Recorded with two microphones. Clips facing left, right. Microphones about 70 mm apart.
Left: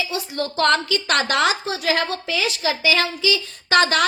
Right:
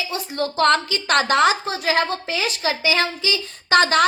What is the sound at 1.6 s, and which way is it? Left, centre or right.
Speech, right.